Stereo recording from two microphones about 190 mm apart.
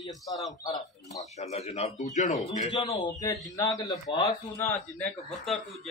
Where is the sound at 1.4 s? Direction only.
35° left (ahead or behind).